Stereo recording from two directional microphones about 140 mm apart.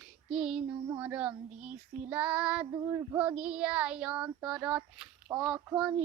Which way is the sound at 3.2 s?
10° right (ahead or behind).